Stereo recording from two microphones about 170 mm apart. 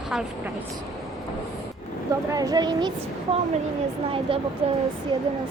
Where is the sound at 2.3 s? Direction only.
20° right (ahead or behind).